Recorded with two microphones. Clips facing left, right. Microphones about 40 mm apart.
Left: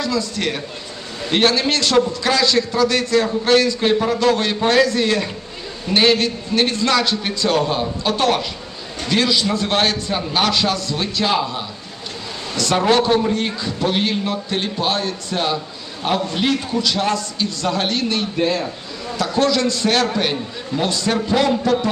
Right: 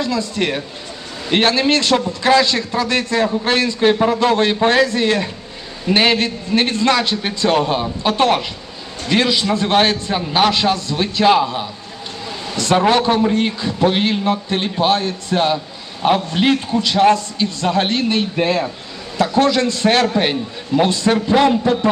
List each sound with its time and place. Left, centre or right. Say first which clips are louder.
0.0 s a man's voice: right 2 dB; right
12.7 s a man's voice: right 2 dB; centre
13.3 s a man's voice: right 3 dB; right